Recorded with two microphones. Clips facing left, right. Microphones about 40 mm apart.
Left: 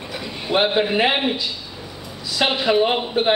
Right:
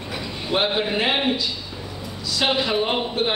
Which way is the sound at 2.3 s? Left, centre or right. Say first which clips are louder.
Left 3 dB; centre.